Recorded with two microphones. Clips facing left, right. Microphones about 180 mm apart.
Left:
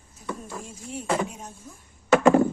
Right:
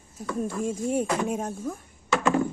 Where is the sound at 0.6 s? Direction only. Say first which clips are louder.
Right 8 dB; 50° right (ahead or behind).